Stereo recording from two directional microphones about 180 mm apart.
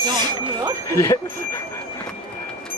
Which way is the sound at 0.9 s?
15° left (ahead or behind).